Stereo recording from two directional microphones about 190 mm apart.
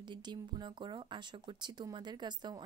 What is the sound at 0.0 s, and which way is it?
Speech, 25° right (ahead or behind).